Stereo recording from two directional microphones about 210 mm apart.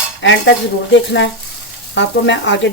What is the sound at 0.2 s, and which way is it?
Speech, 60° left (ahead or behind).